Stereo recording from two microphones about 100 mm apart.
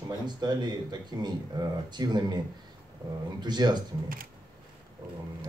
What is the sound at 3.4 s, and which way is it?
Speech, 45° right (ahead or behind).